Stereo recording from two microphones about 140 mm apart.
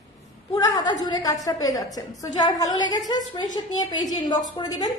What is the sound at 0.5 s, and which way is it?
A woman's voice, 25° left (ahead or behind).